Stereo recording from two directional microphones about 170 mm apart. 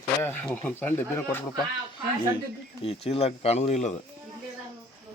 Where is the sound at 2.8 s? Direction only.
35° left (ahead or behind).